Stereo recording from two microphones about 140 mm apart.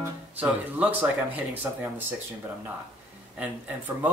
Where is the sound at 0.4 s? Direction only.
10° right (ahead or behind).